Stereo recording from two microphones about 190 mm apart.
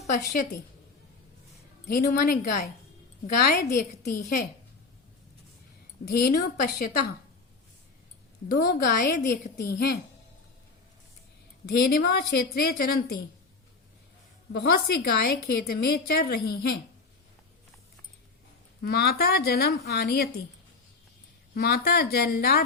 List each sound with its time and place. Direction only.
1.9 s a woman's voice: 50° left (ahead or behind)
6.1 s a woman's voice: 50° left (ahead or behind)
8.5 s a woman's voice: 50° left (ahead or behind)
11.7 s a woman's voice: 55° left (ahead or behind)
14.5 s a woman's voice: 60° left (ahead or behind)
18.8 s a woman's voice: 55° left (ahead or behind)
21.5 s a woman's voice: 55° left (ahead or behind)